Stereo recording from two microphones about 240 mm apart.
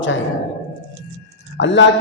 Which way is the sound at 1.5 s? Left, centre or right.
Left.